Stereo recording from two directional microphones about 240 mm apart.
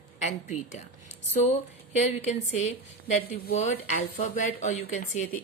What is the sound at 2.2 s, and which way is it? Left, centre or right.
A woman's voice, left.